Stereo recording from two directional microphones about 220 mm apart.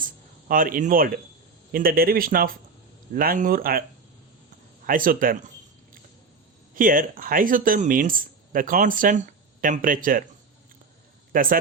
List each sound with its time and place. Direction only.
0.0 s speech: 40° right (ahead or behind)
4.9 s speech: 40° right (ahead or behind)
6.7 s speech: 40° right (ahead or behind)
11.3 s speech: 40° right (ahead or behind)